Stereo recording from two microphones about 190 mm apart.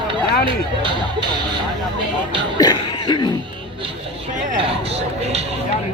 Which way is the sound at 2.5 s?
20° left (ahead or behind).